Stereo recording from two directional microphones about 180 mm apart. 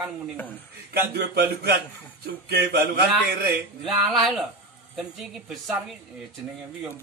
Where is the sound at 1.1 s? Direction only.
65° right (ahead or behind).